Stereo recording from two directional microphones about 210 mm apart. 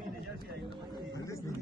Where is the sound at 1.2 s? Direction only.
15° left (ahead or behind).